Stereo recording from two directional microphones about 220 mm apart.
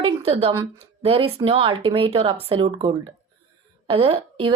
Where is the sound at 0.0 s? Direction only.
25° right (ahead or behind).